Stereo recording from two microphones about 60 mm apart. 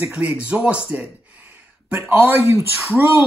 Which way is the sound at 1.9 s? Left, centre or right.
Right.